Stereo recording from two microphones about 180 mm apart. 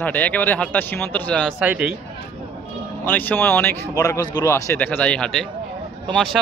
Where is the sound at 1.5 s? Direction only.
10° right (ahead or behind).